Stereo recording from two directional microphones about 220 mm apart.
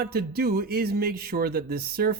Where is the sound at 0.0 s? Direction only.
45° right (ahead or behind).